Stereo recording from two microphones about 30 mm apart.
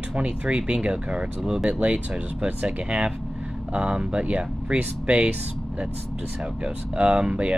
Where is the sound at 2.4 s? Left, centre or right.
Right.